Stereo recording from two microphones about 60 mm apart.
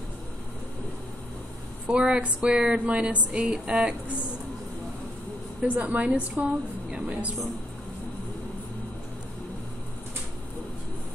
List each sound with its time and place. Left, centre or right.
1.9 s speech: centre
5.6 s a woman's voice: right